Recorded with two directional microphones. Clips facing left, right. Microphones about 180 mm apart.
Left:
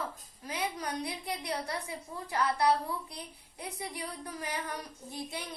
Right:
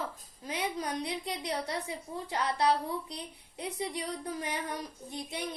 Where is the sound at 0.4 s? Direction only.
20° right (ahead or behind).